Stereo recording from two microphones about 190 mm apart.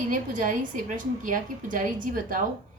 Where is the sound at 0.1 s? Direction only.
45° right (ahead or behind).